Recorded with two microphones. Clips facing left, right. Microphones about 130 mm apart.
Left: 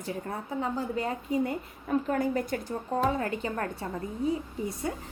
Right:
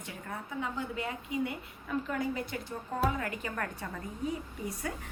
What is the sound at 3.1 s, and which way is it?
Speech, 30° left (ahead or behind).